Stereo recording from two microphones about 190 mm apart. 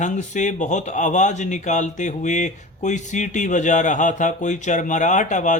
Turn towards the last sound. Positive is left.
turn(degrees=40)  # may be behind; listen again after turning